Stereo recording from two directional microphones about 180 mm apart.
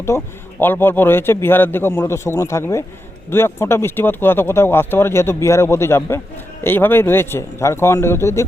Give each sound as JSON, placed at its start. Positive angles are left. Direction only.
{"t": 0.1, "sound": "speech", "side_deg": 15}